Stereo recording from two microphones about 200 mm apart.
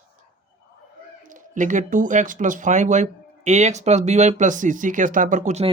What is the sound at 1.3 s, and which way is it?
Speech, 40° right (ahead or behind).